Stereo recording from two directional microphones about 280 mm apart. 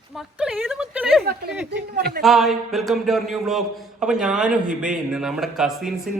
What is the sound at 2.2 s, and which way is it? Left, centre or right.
Speech, centre.